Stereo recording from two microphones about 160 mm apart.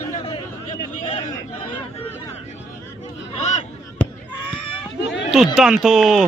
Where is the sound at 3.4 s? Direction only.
45° left (ahead or behind).